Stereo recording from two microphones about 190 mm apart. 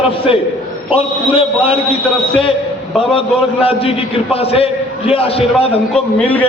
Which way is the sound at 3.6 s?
30° left (ahead or behind).